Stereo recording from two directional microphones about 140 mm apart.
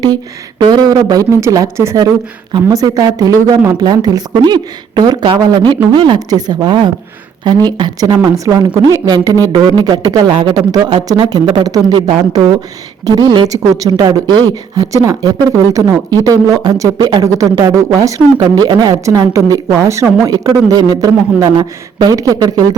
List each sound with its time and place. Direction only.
0.6 s a woman's voice: 30° right (ahead or behind)
13.1 s speech: 30° right (ahead or behind)